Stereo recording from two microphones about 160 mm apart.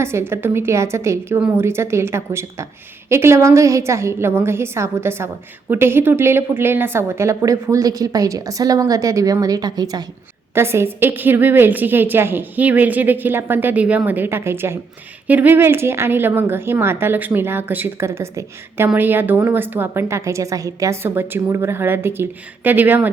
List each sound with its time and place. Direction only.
0.0 s a woman's voice: 15° right (ahead or behind)